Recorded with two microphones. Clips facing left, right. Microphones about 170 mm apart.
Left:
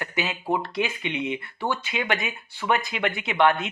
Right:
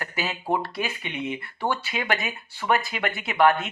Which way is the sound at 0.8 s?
20° left (ahead or behind).